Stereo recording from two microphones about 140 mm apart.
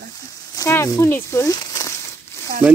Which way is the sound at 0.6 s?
25° left (ahead or behind).